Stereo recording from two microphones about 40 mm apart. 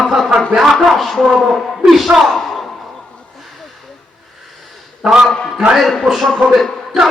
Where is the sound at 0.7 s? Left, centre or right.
Centre.